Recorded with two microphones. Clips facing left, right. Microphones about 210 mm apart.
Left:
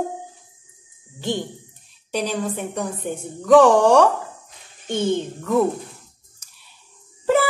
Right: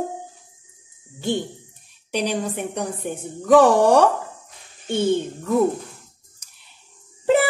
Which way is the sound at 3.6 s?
10° right (ahead or behind).